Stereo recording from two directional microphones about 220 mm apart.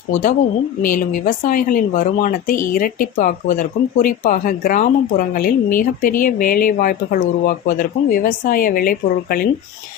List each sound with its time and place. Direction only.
0.1 s speech: 35° left (ahead or behind)